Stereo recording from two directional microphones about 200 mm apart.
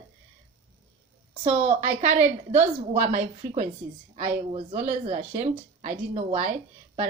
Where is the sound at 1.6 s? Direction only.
40° right (ahead or behind).